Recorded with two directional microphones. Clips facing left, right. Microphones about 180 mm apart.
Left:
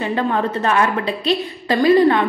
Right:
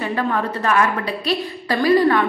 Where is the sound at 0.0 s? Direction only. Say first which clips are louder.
Left 2 dB; 25° left (ahead or behind).